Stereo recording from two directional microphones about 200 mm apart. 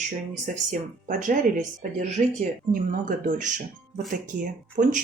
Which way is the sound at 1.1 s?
40° right (ahead or behind).